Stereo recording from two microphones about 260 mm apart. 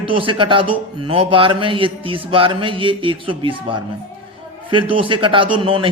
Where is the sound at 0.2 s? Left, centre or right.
Centre.